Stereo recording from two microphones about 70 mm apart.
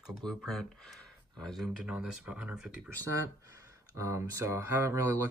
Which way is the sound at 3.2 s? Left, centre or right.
Right.